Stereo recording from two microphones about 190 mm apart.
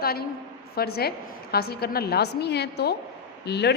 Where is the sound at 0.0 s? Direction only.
55° left (ahead or behind).